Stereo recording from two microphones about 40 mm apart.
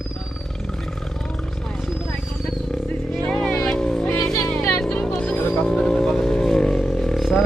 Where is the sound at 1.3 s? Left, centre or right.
Centre.